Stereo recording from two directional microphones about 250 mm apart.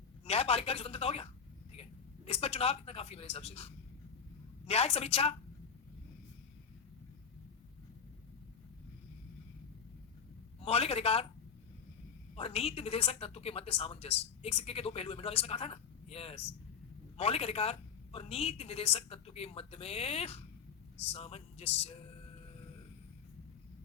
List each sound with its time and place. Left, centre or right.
0.3 s a woman's voice: left
10.7 s a woman's voice: left
12.4 s a woman's voice: left